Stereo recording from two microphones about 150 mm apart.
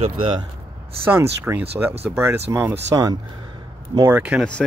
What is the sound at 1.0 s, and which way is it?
Speech, 15° right (ahead or behind).